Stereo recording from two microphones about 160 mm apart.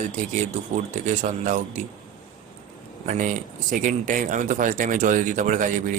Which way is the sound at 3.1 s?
55° right (ahead or behind).